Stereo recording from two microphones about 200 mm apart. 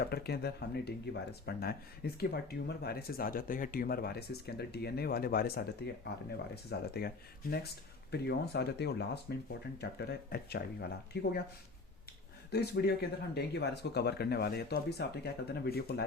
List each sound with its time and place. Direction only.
0.0 s speech: 50° left (ahead or behind)
8.1 s speech: 55° left (ahead or behind)
12.5 s speech: 55° left (ahead or behind)